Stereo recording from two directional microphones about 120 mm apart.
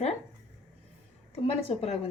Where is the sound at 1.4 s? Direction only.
55° left (ahead or behind).